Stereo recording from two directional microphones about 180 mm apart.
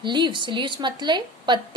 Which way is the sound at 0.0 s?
25° right (ahead or behind).